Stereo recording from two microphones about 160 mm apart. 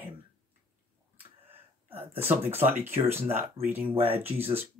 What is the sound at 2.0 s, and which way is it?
Speech, 10° right (ahead or behind).